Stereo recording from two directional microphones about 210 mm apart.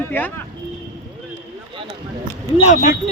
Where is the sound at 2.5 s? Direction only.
35° left (ahead or behind).